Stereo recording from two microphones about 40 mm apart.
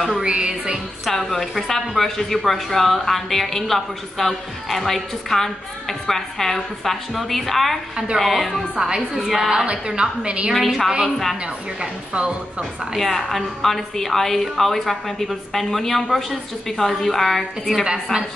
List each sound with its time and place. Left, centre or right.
0.1 s music: right
1.0 s a woman's voice: centre
8.7 s a woman's voice: centre
9.7 s a woman's voice: right
10.5 s a woman's voice: centre
12.1 s a woman's voice: right
12.9 s a woman's voice: centre